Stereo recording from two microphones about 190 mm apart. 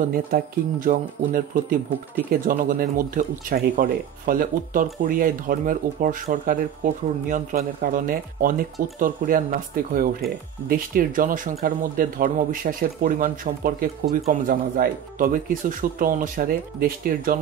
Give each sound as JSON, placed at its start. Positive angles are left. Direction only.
{"t": 0.1, "sound": "speech", "side_deg": -45}